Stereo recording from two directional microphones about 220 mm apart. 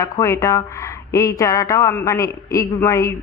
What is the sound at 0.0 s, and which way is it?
Speech, 15° left (ahead or behind).